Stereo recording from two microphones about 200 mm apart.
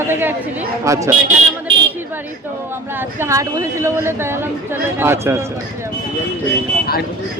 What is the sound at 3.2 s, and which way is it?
Speech, 15° right (ahead or behind).